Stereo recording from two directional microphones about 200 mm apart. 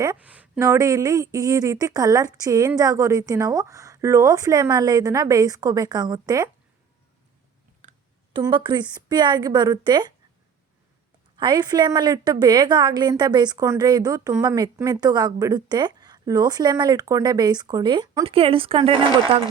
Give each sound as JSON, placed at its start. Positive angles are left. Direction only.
{"t": 0.0, "sound": "speech", "side_deg": -10}
{"t": 7.8, "sound": "a sound", "side_deg": -40}
{"t": 8.3, "sound": "a woman's voice", "side_deg": -25}
{"t": 11.3, "sound": "a woman's voice", "side_deg": -20}